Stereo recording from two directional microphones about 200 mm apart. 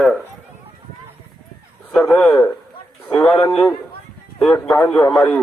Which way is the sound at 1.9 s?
5° left (ahead or behind).